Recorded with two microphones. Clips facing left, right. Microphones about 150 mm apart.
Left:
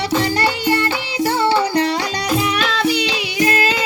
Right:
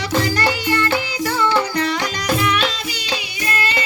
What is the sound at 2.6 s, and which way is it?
Music, 65° left (ahead or behind).